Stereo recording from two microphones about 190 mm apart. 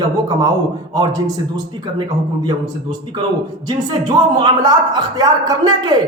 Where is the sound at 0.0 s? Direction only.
20° right (ahead or behind).